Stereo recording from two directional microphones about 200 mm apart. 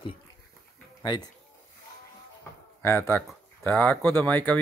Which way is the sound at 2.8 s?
10° left (ahead or behind).